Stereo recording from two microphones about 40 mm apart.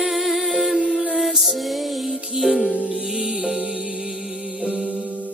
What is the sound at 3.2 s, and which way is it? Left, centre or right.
Music, centre.